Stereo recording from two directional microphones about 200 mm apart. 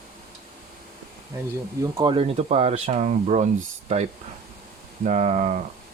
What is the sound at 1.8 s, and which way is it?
Speech, 20° right (ahead or behind).